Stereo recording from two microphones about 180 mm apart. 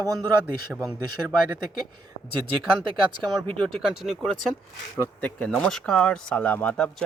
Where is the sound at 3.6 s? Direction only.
Centre (ahead or behind).